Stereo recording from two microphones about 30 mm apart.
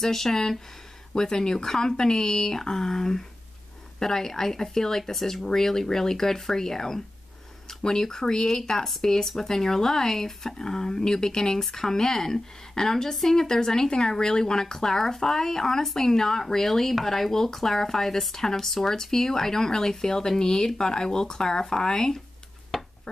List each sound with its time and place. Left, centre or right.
0.0 s speech: centre